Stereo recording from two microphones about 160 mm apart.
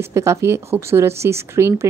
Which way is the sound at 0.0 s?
20° right (ahead or behind).